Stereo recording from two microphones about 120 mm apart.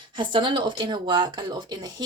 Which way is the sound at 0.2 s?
40° right (ahead or behind).